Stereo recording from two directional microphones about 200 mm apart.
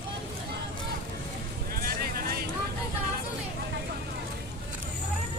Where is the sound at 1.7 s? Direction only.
50° right (ahead or behind).